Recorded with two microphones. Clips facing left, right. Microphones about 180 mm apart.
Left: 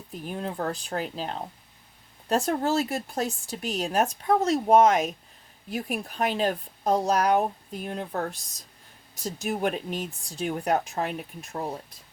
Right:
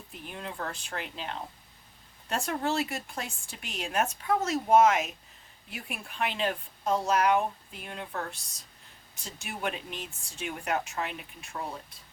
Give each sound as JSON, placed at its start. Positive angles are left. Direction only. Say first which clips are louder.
{"t": 0.1, "sound": "speech", "louder": "left 8 dB", "side_deg": 40}
{"t": 9.2, "sound": "speech", "louder": "left 8 dB", "side_deg": 40}